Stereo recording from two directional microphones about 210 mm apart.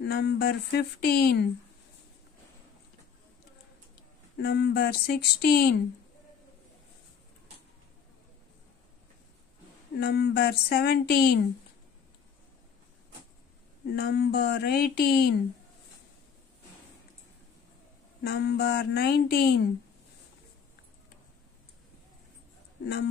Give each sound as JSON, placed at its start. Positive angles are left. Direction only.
{"t": 0.0, "sound": "speech", "side_deg": 50}
{"t": 4.4, "sound": "speech", "side_deg": 50}
{"t": 9.9, "sound": "speech", "side_deg": 50}
{"t": 13.9, "sound": "speech", "side_deg": 50}
{"t": 18.2, "sound": "speech", "side_deg": 50}